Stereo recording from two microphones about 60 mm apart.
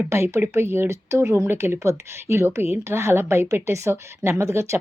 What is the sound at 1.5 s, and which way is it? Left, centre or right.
A woman's voice, right.